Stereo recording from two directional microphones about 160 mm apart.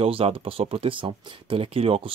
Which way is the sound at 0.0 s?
35° right (ahead or behind).